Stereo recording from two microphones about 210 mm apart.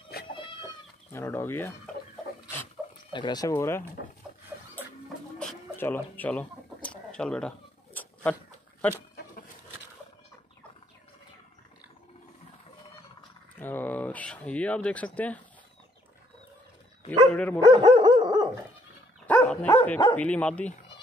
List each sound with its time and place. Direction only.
0.1 s cat: 50° left (ahead or behind)
1.1 s speech: 10° left (ahead or behind)
3.1 s speech: 20° left (ahead or behind)
5.4 s chicken: 10° left (ahead or behind)
13.6 s a sound: 10° left (ahead or behind)
15.1 s speech: 5° left (ahead or behind)
17.3 s dog: 5° left (ahead or behind)
17.7 s dog: 20° right (ahead or behind)
19.2 s dog: 5° left (ahead or behind)
20.2 s speech: 5° left (ahead or behind)